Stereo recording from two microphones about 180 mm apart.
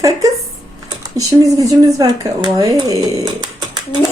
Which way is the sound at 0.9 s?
20° right (ahead or behind).